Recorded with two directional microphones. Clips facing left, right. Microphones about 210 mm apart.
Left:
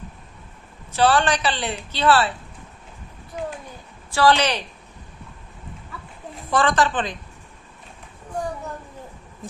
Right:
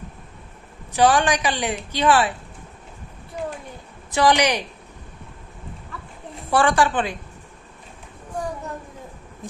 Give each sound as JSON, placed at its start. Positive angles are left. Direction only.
{"t": 0.9, "sound": "speech", "side_deg": -15}
{"t": 4.1, "sound": "speech", "side_deg": -15}
{"t": 6.5, "sound": "speech", "side_deg": -10}